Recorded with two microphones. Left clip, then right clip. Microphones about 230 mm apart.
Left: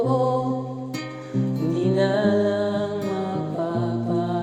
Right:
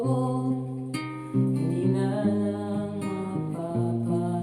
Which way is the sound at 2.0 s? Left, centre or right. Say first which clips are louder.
Left 8 dB; left.